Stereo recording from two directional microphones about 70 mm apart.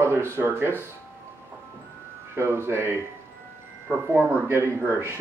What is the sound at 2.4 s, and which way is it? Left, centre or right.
Speech, right.